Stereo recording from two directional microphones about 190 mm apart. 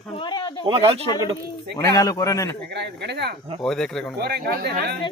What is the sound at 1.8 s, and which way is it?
Speech, 20° left (ahead or behind).